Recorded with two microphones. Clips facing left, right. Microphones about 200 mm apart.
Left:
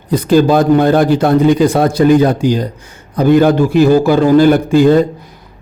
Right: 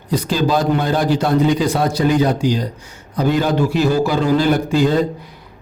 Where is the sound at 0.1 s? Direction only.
55° left (ahead or behind).